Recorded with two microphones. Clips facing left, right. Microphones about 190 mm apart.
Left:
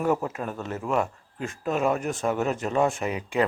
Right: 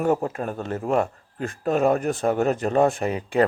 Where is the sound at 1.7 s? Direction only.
40° right (ahead or behind).